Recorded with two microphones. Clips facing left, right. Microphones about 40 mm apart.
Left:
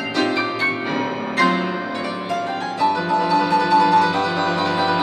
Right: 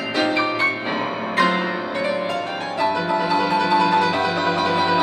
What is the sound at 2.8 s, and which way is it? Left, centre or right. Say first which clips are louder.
Music: left 2 dB; centre.